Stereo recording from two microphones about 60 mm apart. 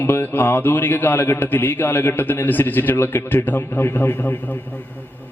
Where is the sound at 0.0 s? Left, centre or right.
Left.